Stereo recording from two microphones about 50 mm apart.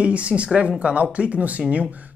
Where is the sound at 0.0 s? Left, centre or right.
Right.